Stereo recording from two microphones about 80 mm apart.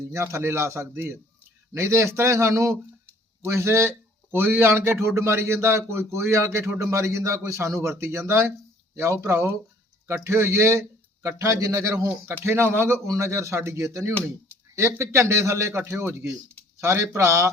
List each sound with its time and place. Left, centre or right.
0.0 s a man's voice: right